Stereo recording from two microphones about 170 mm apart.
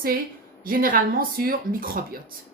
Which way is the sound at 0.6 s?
55° right (ahead or behind).